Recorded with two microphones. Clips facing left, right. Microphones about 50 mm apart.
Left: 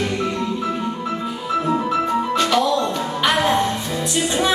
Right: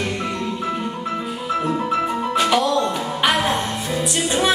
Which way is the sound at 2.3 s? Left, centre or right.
Centre.